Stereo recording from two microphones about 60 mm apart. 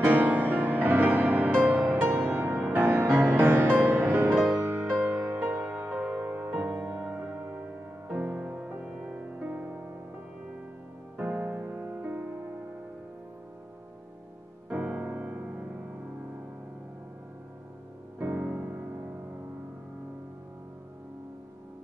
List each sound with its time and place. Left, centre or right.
0.0 s music: right
11.1 s music: right
15.0 s music: right
18.2 s music: right